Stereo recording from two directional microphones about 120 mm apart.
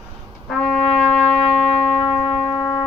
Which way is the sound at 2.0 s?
45° left (ahead or behind).